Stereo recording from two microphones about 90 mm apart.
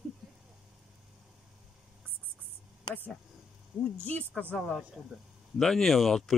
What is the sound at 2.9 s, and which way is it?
Speech, 50° left (ahead or behind).